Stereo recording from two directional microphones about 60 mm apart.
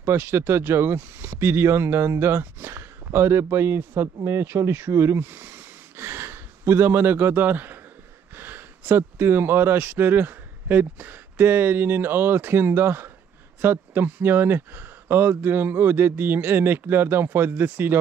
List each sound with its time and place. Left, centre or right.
0.0 s speech: right